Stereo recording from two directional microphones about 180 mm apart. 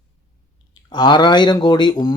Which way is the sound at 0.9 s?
25° left (ahead or behind).